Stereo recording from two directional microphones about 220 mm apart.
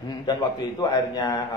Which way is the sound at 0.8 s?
15° left (ahead or behind).